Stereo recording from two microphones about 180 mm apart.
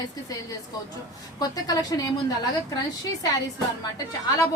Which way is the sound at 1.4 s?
20° left (ahead or behind).